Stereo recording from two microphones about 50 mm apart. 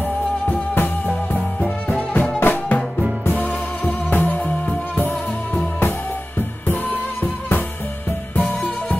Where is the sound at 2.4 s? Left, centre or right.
Left.